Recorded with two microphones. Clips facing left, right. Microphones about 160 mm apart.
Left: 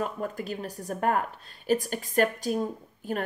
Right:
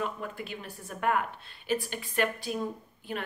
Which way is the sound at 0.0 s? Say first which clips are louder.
Left 4 dB; 40° left (ahead or behind).